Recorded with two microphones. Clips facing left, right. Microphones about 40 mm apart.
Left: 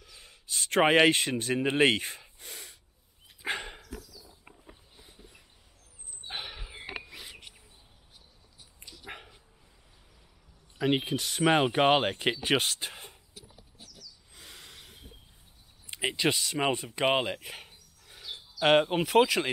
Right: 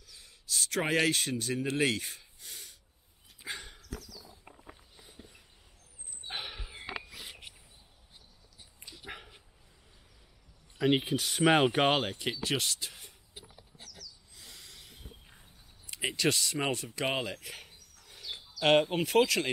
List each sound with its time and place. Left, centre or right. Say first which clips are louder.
0.0 s speech: left 2 dB; left
3.4 s dog: left 8 dB; left
5.0 s a sound: right 1 dB; centre
7.2 s a sound: even; centre
9.0 s dog: left 1 dB; centre
10.8 s speech: even; centre
12.0 s speech: left 5 dB; left
14.3 s a sound: left 6 dB; left
15.9 s speech: left 2 dB; centre